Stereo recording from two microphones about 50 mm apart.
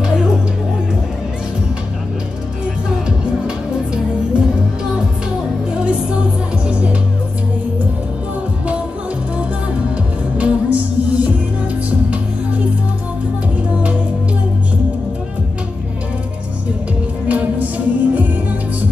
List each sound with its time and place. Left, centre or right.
5.7 s music: centre
10.3 s music: right
17.3 s music: right